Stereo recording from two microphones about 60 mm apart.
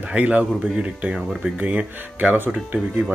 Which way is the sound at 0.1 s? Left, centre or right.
Right.